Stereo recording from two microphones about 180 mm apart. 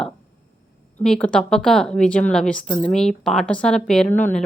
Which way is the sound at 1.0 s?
5° left (ahead or behind).